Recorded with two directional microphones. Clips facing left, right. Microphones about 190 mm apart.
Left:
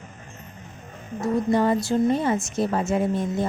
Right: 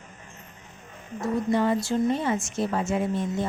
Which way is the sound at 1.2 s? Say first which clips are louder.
Left 3 dB; 40° left (ahead or behind).